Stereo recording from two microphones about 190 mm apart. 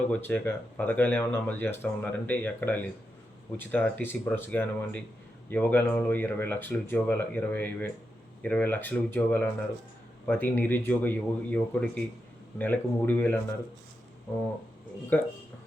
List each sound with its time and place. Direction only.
0.1 s speech: 10° left (ahead or behind)
15.1 s speech: 10° left (ahead or behind)